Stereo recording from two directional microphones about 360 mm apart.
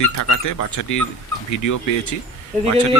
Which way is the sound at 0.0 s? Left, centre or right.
Left.